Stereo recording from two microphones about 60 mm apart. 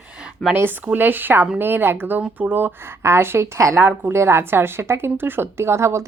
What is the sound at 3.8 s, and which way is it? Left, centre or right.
A woman's voice, right.